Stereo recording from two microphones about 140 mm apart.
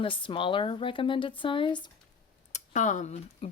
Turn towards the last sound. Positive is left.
turn(degrees=60)  # may be behind; listen again after turning